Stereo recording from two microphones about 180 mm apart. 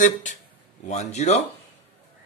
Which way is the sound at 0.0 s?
45° left (ahead or behind).